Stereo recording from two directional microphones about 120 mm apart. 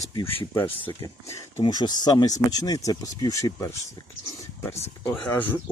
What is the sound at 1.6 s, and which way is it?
Speech, 35° left (ahead or behind).